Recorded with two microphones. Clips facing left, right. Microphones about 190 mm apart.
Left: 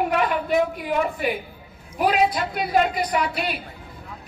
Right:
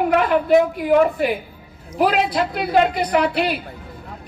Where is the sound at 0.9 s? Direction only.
50° right (ahead or behind).